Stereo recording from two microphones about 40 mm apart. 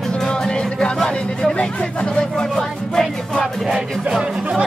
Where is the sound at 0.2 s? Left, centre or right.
Left.